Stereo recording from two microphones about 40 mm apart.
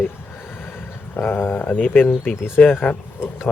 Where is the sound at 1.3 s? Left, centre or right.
Left.